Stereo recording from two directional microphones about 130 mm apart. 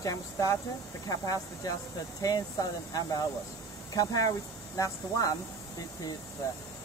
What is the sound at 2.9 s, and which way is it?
Speech, 30° left (ahead or behind).